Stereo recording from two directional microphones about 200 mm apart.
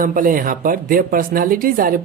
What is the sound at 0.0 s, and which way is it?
Speech, 40° right (ahead or behind).